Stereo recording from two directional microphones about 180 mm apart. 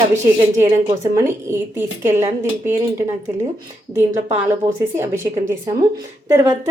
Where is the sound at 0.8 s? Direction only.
15° right (ahead or behind).